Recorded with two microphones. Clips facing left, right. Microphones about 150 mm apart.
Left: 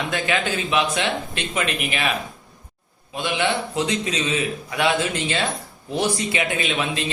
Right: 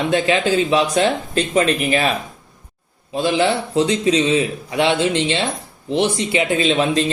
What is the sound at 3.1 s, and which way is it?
A man's voice, 35° right (ahead or behind).